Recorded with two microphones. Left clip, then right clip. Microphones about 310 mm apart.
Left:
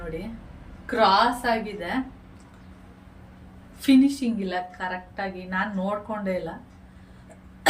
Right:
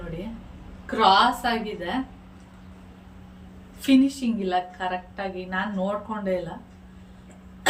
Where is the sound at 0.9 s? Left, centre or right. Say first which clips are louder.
Right 1 dB; centre.